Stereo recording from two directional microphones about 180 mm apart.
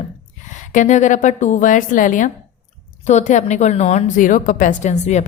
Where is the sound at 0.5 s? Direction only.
45° left (ahead or behind).